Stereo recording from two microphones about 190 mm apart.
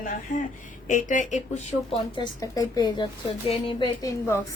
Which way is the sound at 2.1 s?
20° left (ahead or behind).